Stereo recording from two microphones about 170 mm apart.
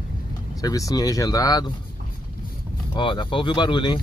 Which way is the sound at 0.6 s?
20° left (ahead or behind).